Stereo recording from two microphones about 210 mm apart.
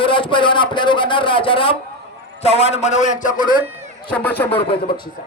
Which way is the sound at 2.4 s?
30° left (ahead or behind).